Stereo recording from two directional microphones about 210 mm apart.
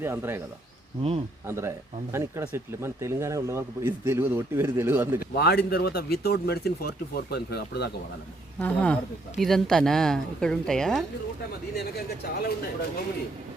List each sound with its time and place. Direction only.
0.0 s speech: 10° right (ahead or behind)
1.5 s speech: 10° right (ahead or behind)
5.2 s speech: 50° left (ahead or behind)
8.5 s speech: 5° left (ahead or behind)
11.7 s speech: 50° left (ahead or behind)